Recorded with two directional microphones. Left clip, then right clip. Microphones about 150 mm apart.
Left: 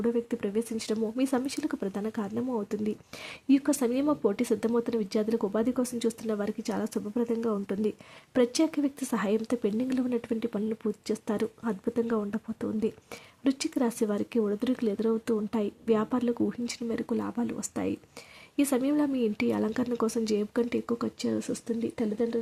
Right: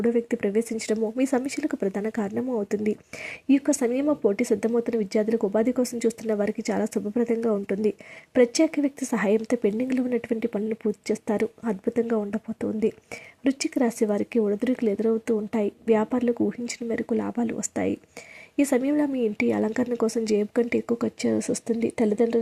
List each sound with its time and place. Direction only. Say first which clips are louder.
0.0 s speech: right 5 dB; 10° right (ahead or behind)
3.7 s speech: right 4 dB; 5° right (ahead or behind)